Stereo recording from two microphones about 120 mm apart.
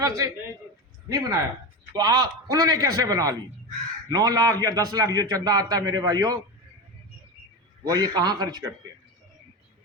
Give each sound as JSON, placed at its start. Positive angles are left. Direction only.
{"t": 0.0, "sound": "a man's voice", "side_deg": -25}
{"t": 7.9, "sound": "a man's voice", "side_deg": -35}